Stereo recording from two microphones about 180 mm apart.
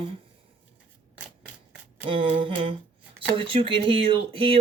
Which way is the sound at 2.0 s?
30° right (ahead or behind).